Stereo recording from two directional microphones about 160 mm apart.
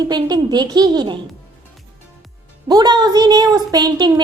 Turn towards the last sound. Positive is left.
turn(degrees=-25)  # may be behind; listen again after turning